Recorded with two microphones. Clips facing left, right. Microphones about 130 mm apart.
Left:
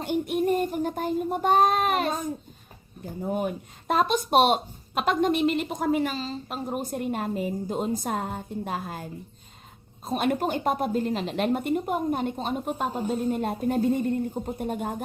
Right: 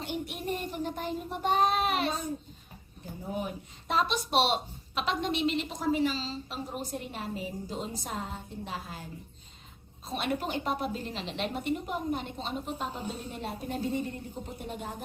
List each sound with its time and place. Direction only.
0.0 s a child's voice: 50° left (ahead or behind)